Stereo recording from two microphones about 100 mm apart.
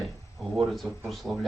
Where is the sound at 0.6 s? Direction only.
Centre (ahead or behind).